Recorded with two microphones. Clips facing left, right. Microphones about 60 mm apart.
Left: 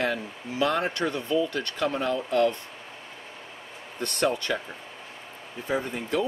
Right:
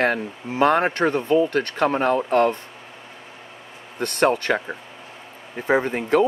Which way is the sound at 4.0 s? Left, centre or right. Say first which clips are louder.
Right 7 dB; right.